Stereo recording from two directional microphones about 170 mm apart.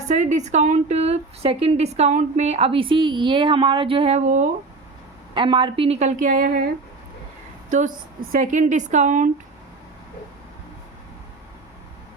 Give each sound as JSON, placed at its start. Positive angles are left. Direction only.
{"t": 0.1, "sound": "a woman's voice", "side_deg": -45}
{"t": 5.3, "sound": "a woman's voice", "side_deg": -30}
{"t": 7.7, "sound": "a woman's voice", "side_deg": -50}